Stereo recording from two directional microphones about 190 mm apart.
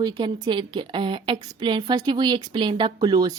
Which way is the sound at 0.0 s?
20° right (ahead or behind).